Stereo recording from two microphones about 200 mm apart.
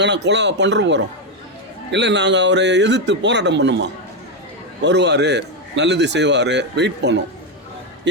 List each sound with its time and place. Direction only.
0.0 s a man's voice: 60° right (ahead or behind)
8.1 s music: 60° right (ahead or behind)